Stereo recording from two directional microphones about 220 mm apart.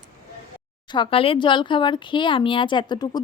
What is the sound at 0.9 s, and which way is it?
Speech, 25° left (ahead or behind).